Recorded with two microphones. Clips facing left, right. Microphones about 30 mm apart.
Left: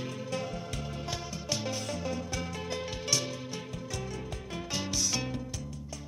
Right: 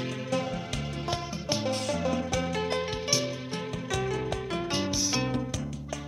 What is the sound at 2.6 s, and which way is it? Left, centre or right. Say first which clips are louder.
Music: right 7 dB; right.